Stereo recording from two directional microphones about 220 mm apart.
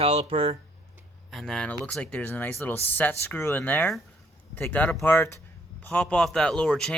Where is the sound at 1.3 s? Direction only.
Centre (ahead or behind).